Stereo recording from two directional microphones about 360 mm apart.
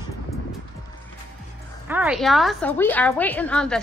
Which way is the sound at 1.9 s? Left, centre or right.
Centre.